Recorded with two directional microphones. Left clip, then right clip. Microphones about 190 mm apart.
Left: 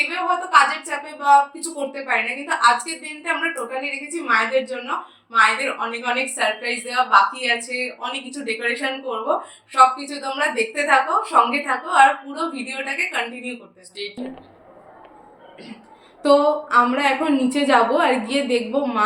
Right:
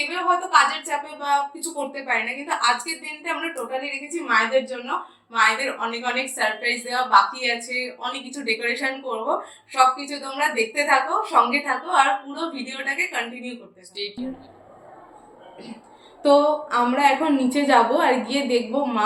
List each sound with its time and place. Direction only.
0.3 s a woman's voice: 15° left (ahead or behind)
13.9 s speech: centre (ahead or behind)
16.2 s a woman's voice: 15° left (ahead or behind)